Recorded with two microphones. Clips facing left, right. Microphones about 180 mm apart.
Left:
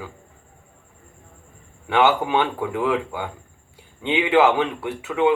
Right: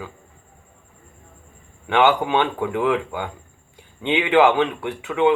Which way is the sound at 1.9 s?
5° left (ahead or behind).